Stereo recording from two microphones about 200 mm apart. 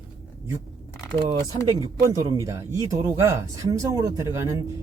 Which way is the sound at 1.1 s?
25° right (ahead or behind).